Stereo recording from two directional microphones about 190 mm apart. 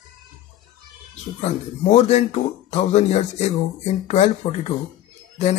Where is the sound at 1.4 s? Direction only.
35° left (ahead or behind).